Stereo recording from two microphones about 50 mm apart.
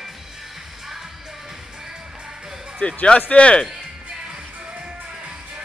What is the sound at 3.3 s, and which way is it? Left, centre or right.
Speech, left.